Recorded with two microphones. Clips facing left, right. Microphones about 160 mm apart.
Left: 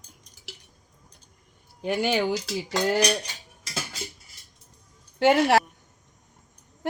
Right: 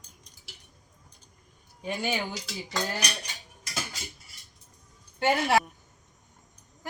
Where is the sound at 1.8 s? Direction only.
75° left (ahead or behind).